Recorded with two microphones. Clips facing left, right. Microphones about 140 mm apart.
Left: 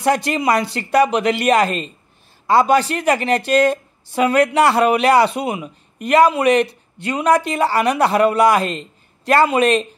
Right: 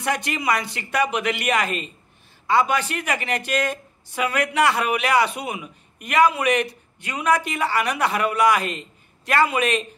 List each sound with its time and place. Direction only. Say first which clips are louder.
0.0 s a woman's voice: left 7 dB; 35° left (ahead or behind)